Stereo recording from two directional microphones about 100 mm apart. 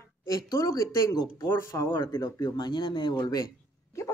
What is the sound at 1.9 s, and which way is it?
Speech, 50° left (ahead or behind).